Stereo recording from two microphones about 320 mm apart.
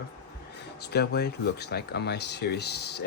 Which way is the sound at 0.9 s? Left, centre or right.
Left.